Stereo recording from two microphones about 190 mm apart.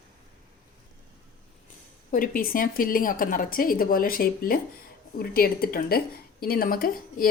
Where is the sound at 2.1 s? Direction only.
45° left (ahead or behind).